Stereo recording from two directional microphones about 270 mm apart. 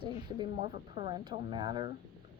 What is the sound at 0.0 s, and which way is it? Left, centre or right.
Speech, centre.